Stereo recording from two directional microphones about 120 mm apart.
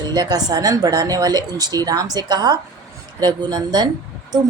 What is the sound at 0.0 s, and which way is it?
A woman's voice, 35° right (ahead or behind).